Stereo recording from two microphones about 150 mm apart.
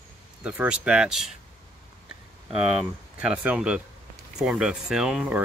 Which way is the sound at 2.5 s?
5° right (ahead or behind).